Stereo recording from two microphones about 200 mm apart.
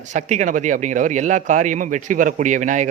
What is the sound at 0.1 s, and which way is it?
A man's voice, 35° right (ahead or behind).